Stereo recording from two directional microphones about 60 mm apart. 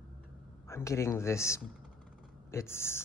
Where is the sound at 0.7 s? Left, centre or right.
Left.